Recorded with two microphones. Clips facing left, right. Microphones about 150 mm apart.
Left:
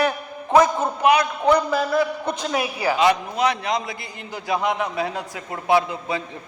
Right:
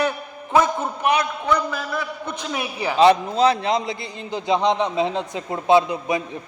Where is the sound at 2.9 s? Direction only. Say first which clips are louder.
Right 5 dB; 30° right (ahead or behind).